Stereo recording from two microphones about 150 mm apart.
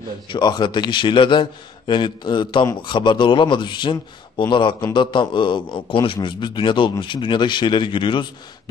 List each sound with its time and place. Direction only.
0.3 s a man's voice: 30° left (ahead or behind)